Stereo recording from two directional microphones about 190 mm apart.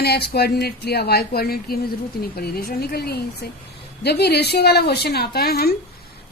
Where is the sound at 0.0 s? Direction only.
55° left (ahead or behind).